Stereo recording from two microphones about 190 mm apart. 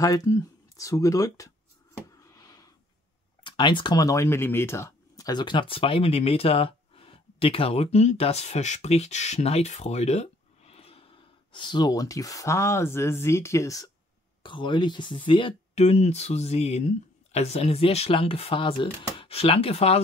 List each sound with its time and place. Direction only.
0.0 s speech: 20° left (ahead or behind)
2.0 s a sound: 20° left (ahead or behind)
3.4 s speech: 25° left (ahead or behind)